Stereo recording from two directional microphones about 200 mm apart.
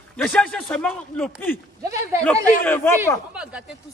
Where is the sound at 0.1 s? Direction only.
5° left (ahead or behind).